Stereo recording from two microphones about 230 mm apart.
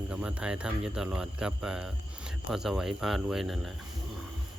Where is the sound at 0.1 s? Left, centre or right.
Centre.